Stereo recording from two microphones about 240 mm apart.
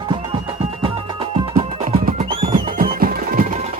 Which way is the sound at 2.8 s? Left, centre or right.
Right.